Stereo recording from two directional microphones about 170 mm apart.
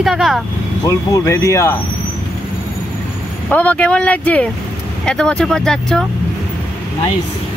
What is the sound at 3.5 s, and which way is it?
Speech, 10° left (ahead or behind).